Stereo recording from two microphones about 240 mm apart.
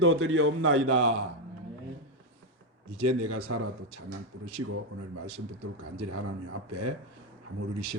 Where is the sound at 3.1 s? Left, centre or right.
Right.